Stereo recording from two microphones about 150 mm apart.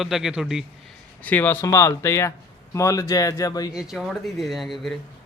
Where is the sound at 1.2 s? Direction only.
10° left (ahead or behind).